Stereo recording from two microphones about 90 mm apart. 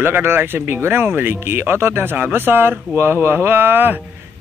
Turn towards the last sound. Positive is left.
turn(degrees=-25)  # may be behind; listen again after turning